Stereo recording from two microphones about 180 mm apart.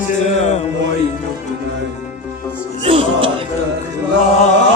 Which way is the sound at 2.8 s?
30° right (ahead or behind).